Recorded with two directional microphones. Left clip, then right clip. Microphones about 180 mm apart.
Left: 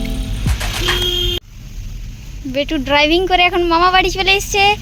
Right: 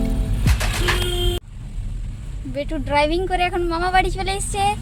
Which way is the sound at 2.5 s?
25° left (ahead or behind).